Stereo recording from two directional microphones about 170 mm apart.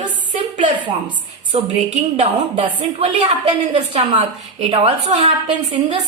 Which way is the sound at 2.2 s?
35° right (ahead or behind).